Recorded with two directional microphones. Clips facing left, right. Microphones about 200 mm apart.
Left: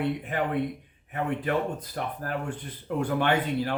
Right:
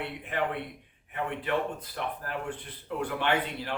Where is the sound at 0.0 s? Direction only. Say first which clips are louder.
Left 4 dB; 45° left (ahead or behind).